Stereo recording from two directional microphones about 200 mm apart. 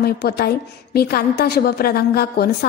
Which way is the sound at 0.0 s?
50° left (ahead or behind).